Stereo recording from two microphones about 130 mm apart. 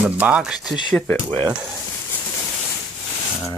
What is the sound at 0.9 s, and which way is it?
Speech, 15° left (ahead or behind).